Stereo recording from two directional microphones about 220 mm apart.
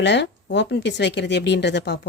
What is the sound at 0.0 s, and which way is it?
A woman's voice, 55° left (ahead or behind).